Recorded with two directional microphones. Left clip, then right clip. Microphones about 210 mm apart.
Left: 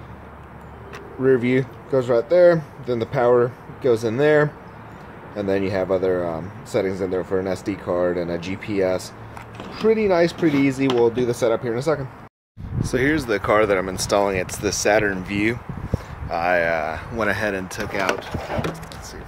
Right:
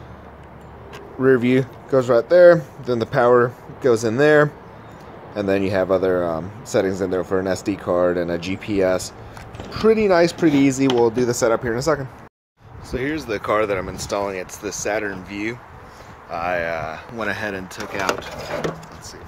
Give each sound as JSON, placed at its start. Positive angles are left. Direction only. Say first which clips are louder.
{"t": 1.2, "sound": "speech", "louder": "right 2 dB", "side_deg": -20}
{"t": 12.9, "sound": "speech", "louder": "left 4 dB", "side_deg": 20}